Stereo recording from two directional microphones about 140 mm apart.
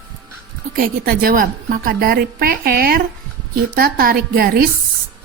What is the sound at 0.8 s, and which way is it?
A woman's voice, 90° right.